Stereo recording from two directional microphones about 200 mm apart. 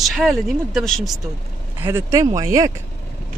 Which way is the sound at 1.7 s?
10° right (ahead or behind).